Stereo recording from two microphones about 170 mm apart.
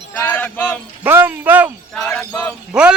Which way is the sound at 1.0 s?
10° right (ahead or behind).